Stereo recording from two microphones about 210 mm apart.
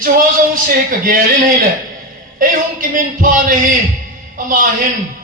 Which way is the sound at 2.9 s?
40° right (ahead or behind).